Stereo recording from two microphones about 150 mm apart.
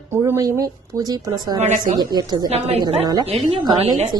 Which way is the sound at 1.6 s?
55° right (ahead or behind).